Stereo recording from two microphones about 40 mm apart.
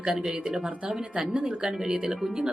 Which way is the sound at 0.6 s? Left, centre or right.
Right.